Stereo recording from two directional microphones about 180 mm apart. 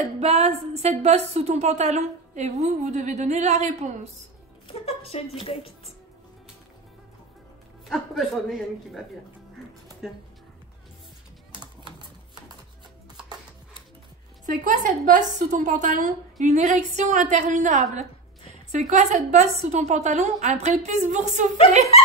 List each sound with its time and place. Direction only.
0.2 s speech: 35° right (ahead or behind)
4.6 s a woman's voice: 35° left (ahead or behind)
7.9 s a man's voice: centre (ahead or behind)
10.0 s a man's voice: 5° right (ahead or behind)
11.6 s typewriter: 25° right (ahead or behind)
14.4 s a woman's voice: 45° right (ahead or behind)